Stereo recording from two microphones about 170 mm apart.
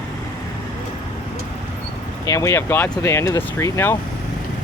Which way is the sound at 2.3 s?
20° left (ahead or behind).